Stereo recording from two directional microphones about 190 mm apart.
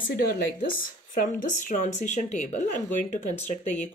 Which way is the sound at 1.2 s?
45° left (ahead or behind).